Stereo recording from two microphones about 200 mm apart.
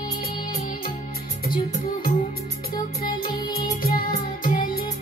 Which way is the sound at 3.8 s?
45° left (ahead or behind).